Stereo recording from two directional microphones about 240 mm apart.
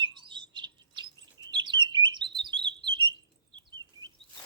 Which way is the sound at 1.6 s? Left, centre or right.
Centre.